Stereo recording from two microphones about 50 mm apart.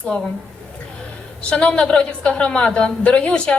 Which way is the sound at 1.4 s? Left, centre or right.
Left.